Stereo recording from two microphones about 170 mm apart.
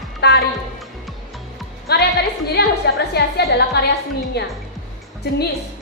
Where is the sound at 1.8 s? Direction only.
70° left (ahead or behind).